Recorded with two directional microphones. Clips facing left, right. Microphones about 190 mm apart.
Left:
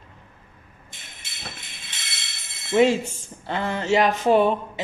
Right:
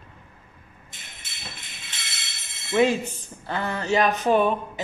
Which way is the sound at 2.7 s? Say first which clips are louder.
Left 2 dB; 25° left (ahead or behind).